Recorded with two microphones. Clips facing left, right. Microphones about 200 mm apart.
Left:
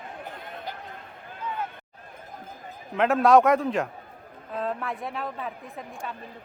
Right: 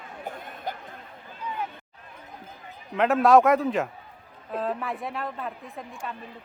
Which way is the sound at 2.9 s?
Centre (ahead or behind).